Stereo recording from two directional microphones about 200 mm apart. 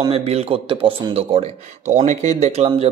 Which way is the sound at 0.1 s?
30° right (ahead or behind).